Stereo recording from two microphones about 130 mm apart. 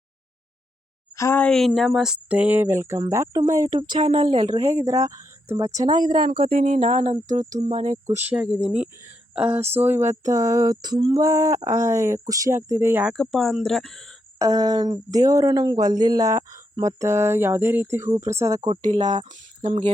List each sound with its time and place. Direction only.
1.1 s a sound: 25° left (ahead or behind)
1.4 s speech: 5° left (ahead or behind); by 3.8 s 25° right (ahead or behind)
3.8 s speech: 40° right (ahead or behind)
6.4 s speech: 90° right
6.7 s speech: 45° right (ahead or behind)
7.3 s speech: 70° right (ahead or behind)
8.4 s speech: 20° right (ahead or behind)
13.1 s speech: 5° left (ahead or behind)
14.3 s speech: 25° right (ahead or behind)
19.3 s speech: 55° right (ahead or behind)